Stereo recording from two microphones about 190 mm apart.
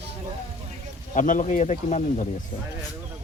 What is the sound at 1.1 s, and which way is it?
Speech, 40° left (ahead or behind).